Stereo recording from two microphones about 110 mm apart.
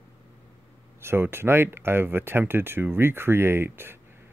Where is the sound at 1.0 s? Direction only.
20° right (ahead or behind).